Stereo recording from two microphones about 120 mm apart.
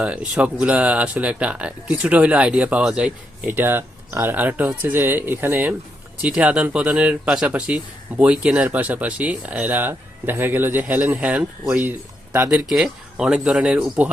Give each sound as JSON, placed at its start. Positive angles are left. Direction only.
{"t": 0.0, "sound": "speech", "side_deg": -10}
{"t": 3.4, "sound": "speech", "side_deg": -15}
{"t": 12.5, "sound": "speech", "side_deg": -5}